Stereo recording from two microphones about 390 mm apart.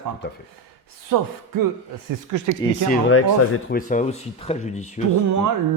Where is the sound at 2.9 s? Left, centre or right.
Left.